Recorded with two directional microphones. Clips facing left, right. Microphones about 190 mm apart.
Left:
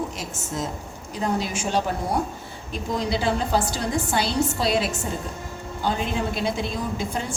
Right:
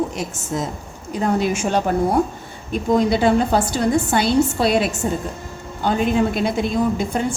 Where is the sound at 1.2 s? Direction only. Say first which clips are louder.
Right 6 dB; 55° right (ahead or behind).